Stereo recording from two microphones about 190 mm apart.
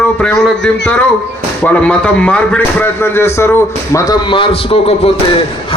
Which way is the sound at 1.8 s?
5° left (ahead or behind).